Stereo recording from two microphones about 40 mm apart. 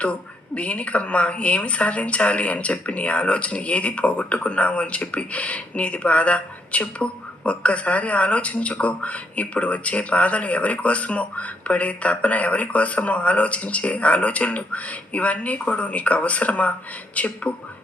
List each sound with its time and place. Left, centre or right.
0.0 s a woman's voice: left